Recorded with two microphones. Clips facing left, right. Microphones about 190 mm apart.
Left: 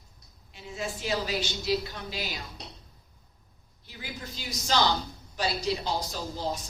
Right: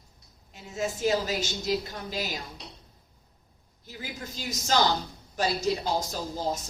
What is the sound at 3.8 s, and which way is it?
A woman's voice, 45° right (ahead or behind).